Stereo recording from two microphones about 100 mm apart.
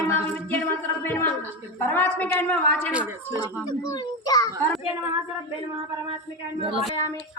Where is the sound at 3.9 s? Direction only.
35° left (ahead or behind).